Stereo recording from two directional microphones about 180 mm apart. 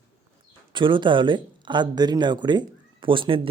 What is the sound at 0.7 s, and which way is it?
Speech, 25° right (ahead or behind).